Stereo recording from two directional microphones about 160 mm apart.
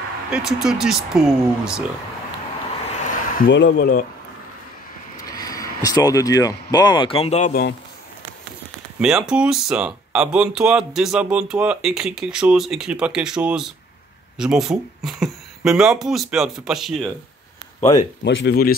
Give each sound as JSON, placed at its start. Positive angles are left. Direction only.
{"t": 0.3, "sound": "speech", "side_deg": -5}
{"t": 3.1, "sound": "speech", "side_deg": 75}
{"t": 5.1, "sound": "speech", "side_deg": 25}
{"t": 9.0, "sound": "speech", "side_deg": -5}
{"t": 18.2, "sound": "speech", "side_deg": 90}